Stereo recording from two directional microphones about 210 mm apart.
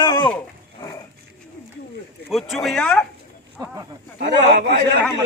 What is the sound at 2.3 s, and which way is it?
Speech, centre (ahead or behind).